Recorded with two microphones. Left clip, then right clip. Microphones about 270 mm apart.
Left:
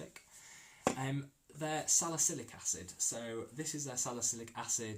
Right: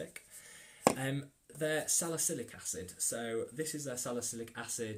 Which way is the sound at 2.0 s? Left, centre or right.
Centre.